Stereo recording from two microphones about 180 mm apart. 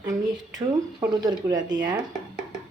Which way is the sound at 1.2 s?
20° right (ahead or behind).